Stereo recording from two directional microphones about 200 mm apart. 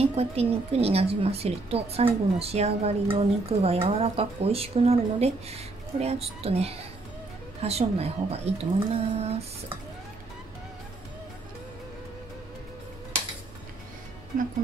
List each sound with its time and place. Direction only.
0.0 s a woman's voice: 30° right (ahead or behind)